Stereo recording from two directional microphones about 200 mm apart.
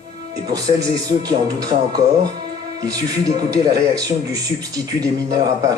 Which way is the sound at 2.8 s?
20° right (ahead or behind).